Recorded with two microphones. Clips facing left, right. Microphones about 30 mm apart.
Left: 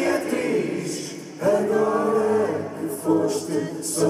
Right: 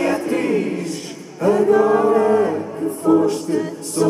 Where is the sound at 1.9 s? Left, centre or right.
Right.